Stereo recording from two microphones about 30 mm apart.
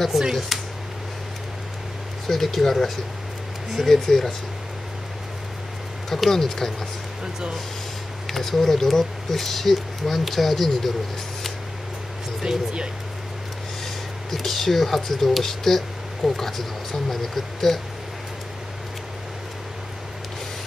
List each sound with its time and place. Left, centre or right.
0.5 s speech: centre
2.2 s speech: centre
6.0 s speech: centre
8.3 s speech: centre
12.4 s speech: right
14.3 s speech: centre